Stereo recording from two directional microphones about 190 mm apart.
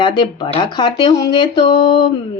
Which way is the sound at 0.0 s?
25° left (ahead or behind).